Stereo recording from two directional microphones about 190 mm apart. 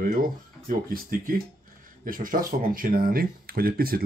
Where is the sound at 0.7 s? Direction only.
45° right (ahead or behind).